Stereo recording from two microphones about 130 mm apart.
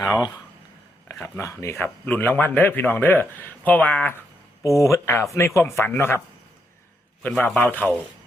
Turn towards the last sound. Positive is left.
turn(degrees=10)  # may be behind; listen again after turning